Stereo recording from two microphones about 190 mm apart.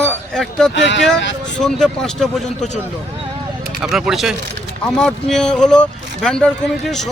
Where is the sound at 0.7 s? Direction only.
70° left (ahead or behind).